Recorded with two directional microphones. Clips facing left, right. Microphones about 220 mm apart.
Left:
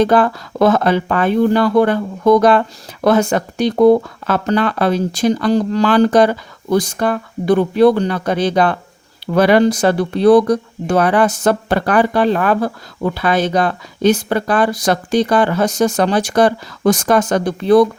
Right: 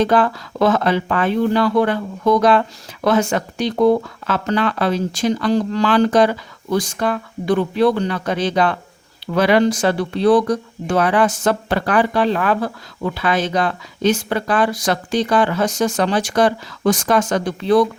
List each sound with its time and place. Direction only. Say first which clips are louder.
0.0 s speech: left 3 dB; 45° left (ahead or behind)